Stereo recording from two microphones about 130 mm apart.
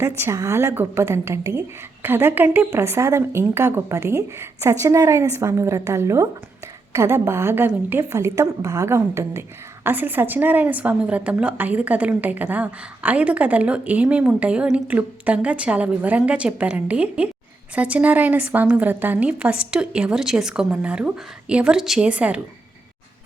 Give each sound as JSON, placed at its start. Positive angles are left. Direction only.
{"t": 0.2, "sound": "a woman's voice", "side_deg": -20}